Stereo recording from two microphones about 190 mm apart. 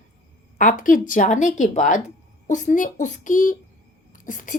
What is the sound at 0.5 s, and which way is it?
A woman's voice, 45° left (ahead or behind).